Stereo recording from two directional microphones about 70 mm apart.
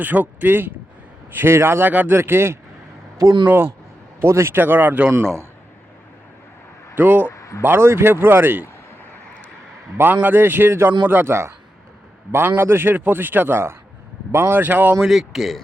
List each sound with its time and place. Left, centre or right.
0.0 s a man's voice: right
5.1 s a man's voice: right
6.9 s speech: right
7.3 s a sound: left
7.6 s a man's voice: right
10.0 s a man's voice: right
15.0 s speech: centre